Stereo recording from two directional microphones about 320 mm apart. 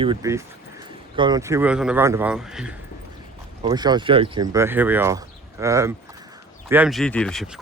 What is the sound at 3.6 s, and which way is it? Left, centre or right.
Speech, centre.